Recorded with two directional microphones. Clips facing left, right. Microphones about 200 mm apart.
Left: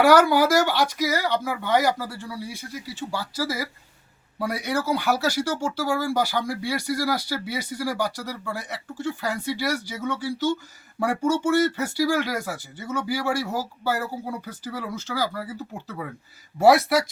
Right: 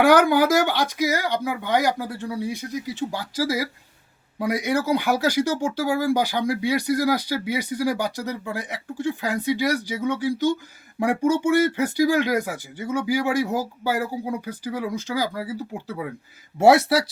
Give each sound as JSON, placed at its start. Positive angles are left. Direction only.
{"t": 0.0, "sound": "speech", "side_deg": -15}
{"t": 16.6, "sound": "speech", "side_deg": -25}